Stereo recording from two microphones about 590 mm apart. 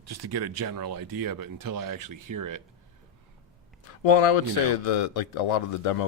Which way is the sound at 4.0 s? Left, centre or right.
Left.